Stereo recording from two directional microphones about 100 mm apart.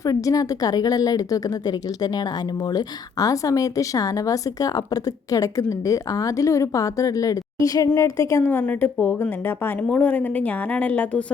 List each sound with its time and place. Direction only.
0.0 s a woman's voice: 35° left (ahead or behind); by 11.2 s 15° left (ahead or behind)